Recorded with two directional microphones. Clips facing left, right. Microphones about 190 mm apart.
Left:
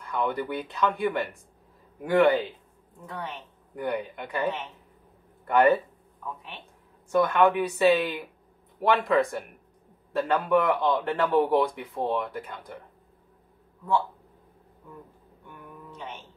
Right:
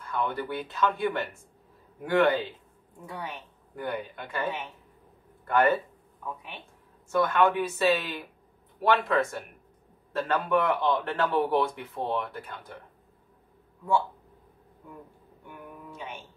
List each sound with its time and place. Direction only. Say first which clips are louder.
0.1 s speech: left 2 dB; 15° left (ahead or behind)
3.7 s speech: left 3 dB; 15° left (ahead or behind)
7.1 s speech: left 2 dB; 15° left (ahead or behind)
15.9 s music: left 1 dB; 10° right (ahead or behind)